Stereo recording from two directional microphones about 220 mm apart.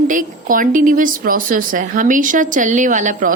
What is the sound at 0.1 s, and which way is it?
A woman's voice, 40° right (ahead or behind).